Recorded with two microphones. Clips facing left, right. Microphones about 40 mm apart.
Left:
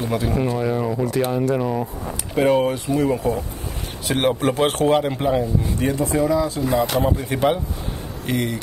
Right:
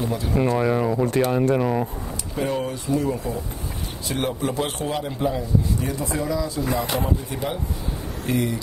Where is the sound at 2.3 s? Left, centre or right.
Left.